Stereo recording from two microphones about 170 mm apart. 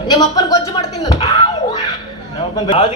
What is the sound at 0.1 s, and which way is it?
Speech, 25° left (ahead or behind).